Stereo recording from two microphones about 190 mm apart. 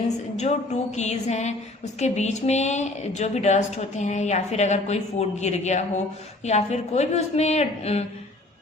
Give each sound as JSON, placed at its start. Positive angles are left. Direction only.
{"t": 0.3, "sound": "a woman's voice", "side_deg": 35}